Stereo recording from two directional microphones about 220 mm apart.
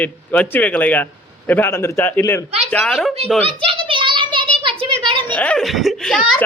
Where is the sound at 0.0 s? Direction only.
5° left (ahead or behind).